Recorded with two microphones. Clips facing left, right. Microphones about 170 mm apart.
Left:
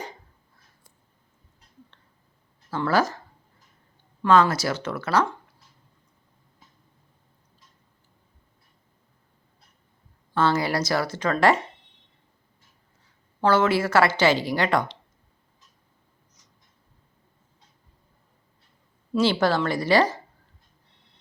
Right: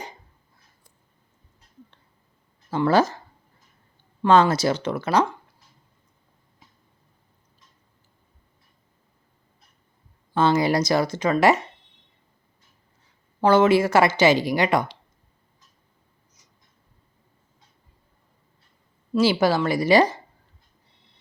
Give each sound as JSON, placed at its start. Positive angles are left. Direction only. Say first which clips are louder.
{"t": 2.6, "sound": "speech", "louder": "right 4 dB", "side_deg": -20}
{"t": 4.2, "sound": "speech", "louder": "right 2 dB", "side_deg": -25}
{"t": 10.3, "sound": "speech", "louder": "right 3 dB", "side_deg": -15}
{"t": 13.4, "sound": "speech", "louder": "right 4 dB", "side_deg": -15}
{"t": 19.1, "sound": "speech", "louder": "right 2 dB", "side_deg": -5}